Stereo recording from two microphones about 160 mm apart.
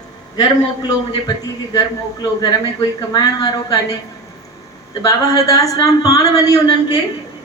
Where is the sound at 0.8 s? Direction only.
25° left (ahead or behind).